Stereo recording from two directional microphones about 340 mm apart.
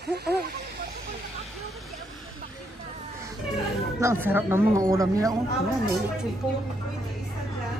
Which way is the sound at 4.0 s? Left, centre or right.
Centre.